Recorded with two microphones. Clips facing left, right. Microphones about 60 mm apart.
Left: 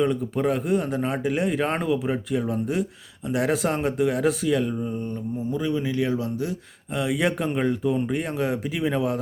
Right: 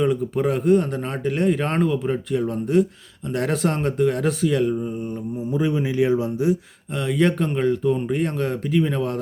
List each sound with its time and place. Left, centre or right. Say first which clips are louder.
0.0 s speech: right 2 dB; centre
5.5 s speech: right 4 dB; right
6.9 s speech: right 3 dB; centre